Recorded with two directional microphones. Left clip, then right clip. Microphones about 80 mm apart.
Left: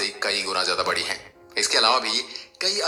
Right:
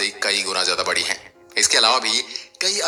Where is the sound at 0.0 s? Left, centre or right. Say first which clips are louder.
Right 4 dB; right.